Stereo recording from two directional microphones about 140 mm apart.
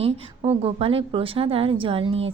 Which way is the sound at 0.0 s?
45° right (ahead or behind).